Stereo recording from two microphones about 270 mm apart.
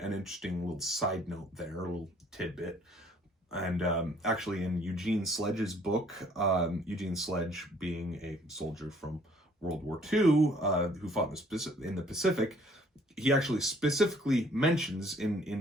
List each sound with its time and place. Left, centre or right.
0.0 s speech: centre